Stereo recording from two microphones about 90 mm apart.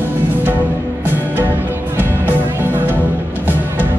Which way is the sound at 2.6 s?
20° right (ahead or behind).